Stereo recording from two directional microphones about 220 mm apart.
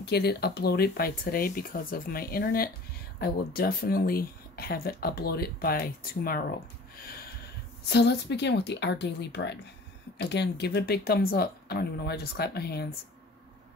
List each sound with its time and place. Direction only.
0.0 s speech: 50° left (ahead or behind)
7.9 s speech: 50° left (ahead or behind)